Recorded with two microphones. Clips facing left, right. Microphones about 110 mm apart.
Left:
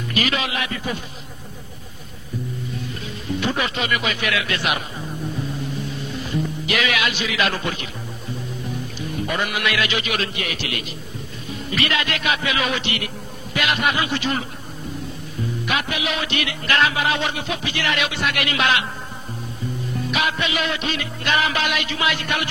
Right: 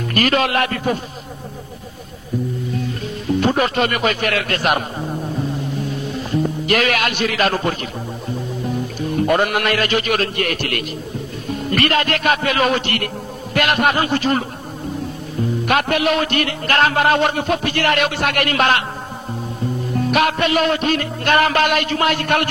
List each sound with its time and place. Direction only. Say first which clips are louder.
0.1 s music: right 7 dB; 50° right (ahead or behind)
3.3 s music: right 7 dB; 45° right (ahead or behind)
6.3 s speech: right 6 dB; 45° right (ahead or behind)
9.1 s music: right 8 dB; 50° right (ahead or behind)
11.4 s a man's voice: right 6 dB; 55° right (ahead or behind)
15.6 s music: right 8 dB; 50° right (ahead or behind)
20.1 s music: right 7 dB; 55° right (ahead or behind)